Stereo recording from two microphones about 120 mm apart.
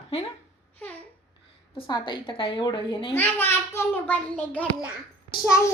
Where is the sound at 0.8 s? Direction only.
15° left (ahead or behind).